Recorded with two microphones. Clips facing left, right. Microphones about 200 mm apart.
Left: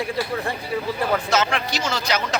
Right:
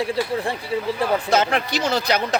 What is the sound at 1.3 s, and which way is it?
Speech, 50° right (ahead or behind).